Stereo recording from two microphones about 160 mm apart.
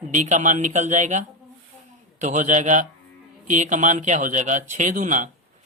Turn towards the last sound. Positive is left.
turn(degrees=-55)  # may be behind; listen again after turning